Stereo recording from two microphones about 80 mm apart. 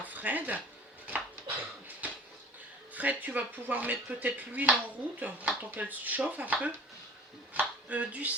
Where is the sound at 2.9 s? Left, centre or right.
Centre.